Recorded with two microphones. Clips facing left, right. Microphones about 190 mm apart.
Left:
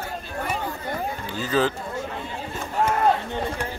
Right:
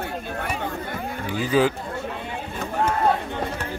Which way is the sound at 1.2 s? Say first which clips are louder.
Right 4 dB; 15° right (ahead or behind).